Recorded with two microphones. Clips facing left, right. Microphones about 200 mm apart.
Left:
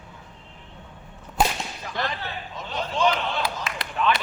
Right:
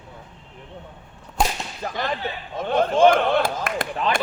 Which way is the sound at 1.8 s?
50° right (ahead or behind).